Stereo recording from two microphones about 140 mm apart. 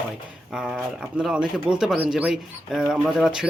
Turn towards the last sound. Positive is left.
turn(degrees=-5)  # may be behind; listen again after turning